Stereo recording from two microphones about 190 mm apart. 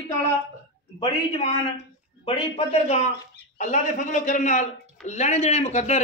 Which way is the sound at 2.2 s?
30° left (ahead or behind).